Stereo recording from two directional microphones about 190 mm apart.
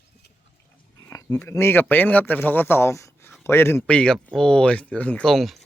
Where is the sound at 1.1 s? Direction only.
15° left (ahead or behind).